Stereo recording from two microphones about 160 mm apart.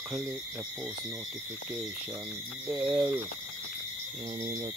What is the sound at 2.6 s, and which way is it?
Speech, 10° right (ahead or behind).